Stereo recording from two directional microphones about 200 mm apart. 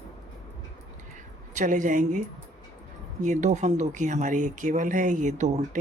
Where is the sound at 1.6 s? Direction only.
40° right (ahead or behind).